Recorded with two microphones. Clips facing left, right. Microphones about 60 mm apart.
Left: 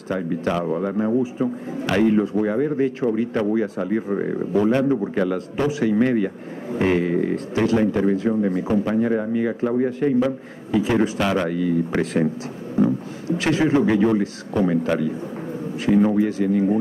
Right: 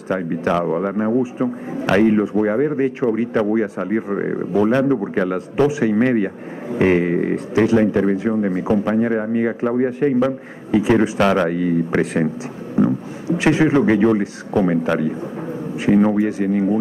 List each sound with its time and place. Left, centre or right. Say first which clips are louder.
0.1 s speech: right 4 dB; right
5.6 s speech: right 6 dB; centre
5.9 s speech: right 2 dB; right
7.3 s speech: right 4 dB; centre; by 11.8 s right
11.9 s speech: right 3 dB; centre
12.7 s a sound: right 2 dB; right
13.8 s speech: right 3 dB; right
16.4 s speech: right 1 dB; right